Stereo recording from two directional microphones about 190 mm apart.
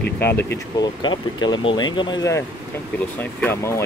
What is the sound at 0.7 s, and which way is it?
Speech, 25° left (ahead or behind).